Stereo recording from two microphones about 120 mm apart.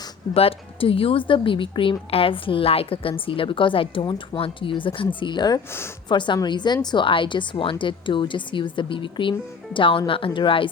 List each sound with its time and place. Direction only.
0.3 s a woman's voice: 50° left (ahead or behind)